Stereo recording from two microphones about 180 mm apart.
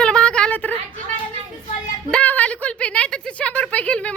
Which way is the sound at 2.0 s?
5° left (ahead or behind).